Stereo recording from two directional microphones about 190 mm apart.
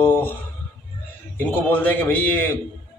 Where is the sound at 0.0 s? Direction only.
10° left (ahead or behind).